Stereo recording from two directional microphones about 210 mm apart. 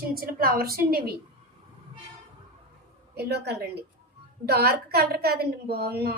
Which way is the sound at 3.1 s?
50° right (ahead or behind).